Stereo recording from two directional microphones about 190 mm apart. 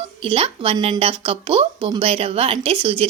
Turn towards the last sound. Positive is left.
turn(degrees=-30)  # may be behind; listen again after turning